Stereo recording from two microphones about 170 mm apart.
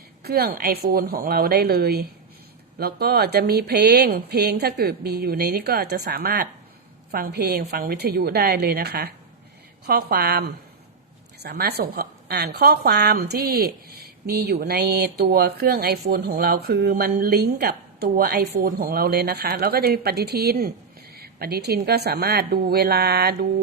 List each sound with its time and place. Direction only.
0.2 s a woman's voice: 65° right (ahead or behind)
11.4 s a woman's voice: 70° right (ahead or behind)